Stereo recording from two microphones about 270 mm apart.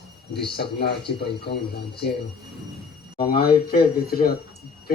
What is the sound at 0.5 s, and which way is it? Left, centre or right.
Speech, left.